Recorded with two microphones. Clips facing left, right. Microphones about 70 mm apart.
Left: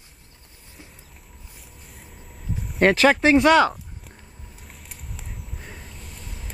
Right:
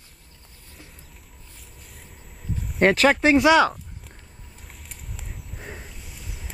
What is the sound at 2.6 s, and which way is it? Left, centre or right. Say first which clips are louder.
Speech: left 1 dB; centre.